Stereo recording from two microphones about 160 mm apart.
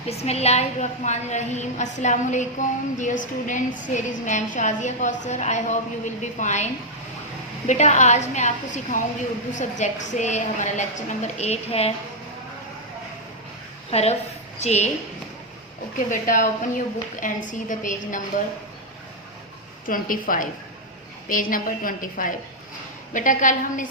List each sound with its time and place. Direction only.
0.1 s a woman's voice: 40° left (ahead or behind)
7.7 s a woman's voice: 45° left (ahead or behind)
13.9 s a woman's voice: 40° left (ahead or behind)
16.0 s a woman's voice: 55° left (ahead or behind)
19.8 s a woman's voice: 60° left (ahead or behind)